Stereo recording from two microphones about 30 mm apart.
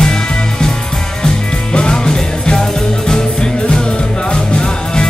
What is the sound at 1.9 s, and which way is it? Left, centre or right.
Music, left.